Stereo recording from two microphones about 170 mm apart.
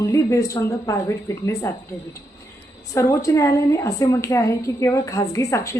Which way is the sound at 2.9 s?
20° left (ahead or behind).